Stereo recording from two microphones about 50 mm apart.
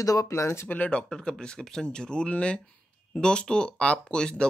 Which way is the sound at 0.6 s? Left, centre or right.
Left.